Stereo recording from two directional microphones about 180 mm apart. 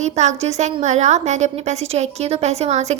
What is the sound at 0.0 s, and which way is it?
A woman's voice, 40° right (ahead or behind).